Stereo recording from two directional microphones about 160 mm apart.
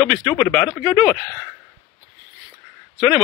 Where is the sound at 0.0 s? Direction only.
Centre (ahead or behind).